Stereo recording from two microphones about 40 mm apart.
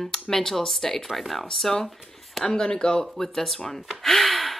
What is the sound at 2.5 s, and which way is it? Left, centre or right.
Speech, left.